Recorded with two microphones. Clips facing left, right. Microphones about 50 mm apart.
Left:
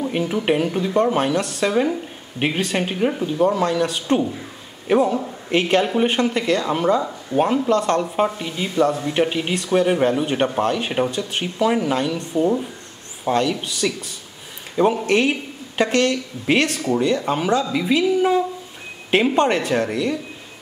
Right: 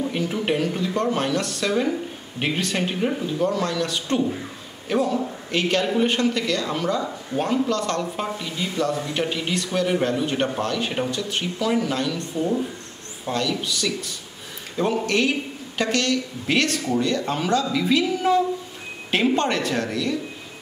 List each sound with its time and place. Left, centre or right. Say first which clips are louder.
0.0 s a woman's voice: left 3 dB; centre
15.0 s a woman's voice: left 3 dB; left